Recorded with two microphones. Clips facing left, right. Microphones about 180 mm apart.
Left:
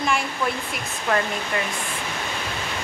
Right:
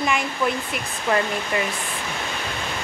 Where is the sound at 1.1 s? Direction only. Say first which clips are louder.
Right 1 dB; centre (ahead or behind).